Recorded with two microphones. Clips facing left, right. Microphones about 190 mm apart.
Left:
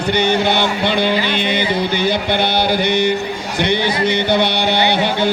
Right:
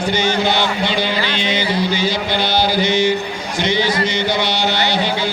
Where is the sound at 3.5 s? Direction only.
60° left (ahead or behind).